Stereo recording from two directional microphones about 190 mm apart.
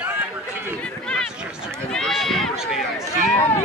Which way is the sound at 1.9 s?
Centre (ahead or behind).